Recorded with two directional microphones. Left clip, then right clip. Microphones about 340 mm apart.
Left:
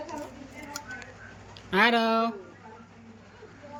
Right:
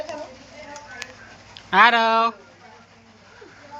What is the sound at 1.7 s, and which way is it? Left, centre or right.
Speech, centre.